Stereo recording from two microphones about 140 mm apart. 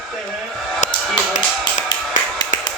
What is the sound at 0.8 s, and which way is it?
Music, 60° left (ahead or behind).